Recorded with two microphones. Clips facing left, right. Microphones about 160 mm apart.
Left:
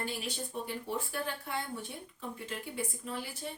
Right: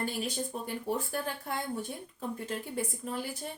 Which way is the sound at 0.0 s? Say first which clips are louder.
Right 4 dB; 45° right (ahead or behind).